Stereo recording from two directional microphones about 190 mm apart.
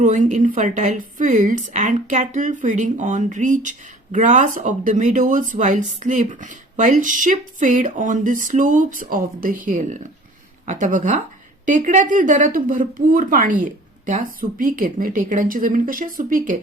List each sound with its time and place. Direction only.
0.0 s a woman's voice: 40° right (ahead or behind)